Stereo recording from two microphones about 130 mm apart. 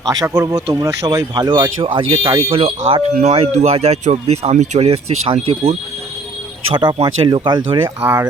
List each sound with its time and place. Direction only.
0.1 s speech: 30° right (ahead or behind)
2.5 s speech: 45° right (ahead or behind)
6.7 s speech: 40° right (ahead or behind)